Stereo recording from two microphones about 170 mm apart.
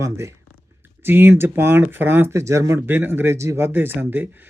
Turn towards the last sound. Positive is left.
turn(degrees=-10)  # may be behind; listen again after turning